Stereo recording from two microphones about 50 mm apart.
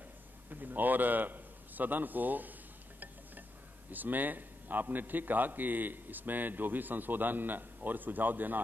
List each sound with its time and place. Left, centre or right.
0.5 s a man's voice: right
3.9 s a man's voice: right